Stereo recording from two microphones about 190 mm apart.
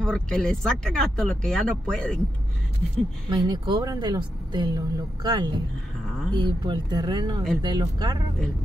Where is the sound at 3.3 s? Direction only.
20° right (ahead or behind).